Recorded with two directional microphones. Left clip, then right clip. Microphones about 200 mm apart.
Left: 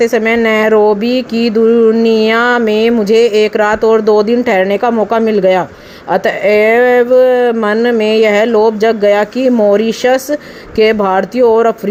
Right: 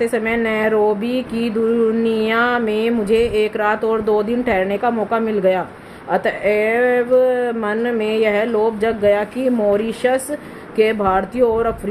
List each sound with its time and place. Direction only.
0.0 s speech: 40° left (ahead or behind)